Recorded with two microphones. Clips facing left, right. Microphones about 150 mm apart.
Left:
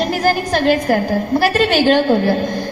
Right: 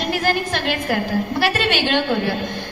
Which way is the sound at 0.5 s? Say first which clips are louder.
Left 7 dB; 40° left (ahead or behind).